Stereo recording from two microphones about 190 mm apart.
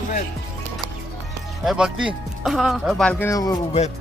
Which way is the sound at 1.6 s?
5° right (ahead or behind).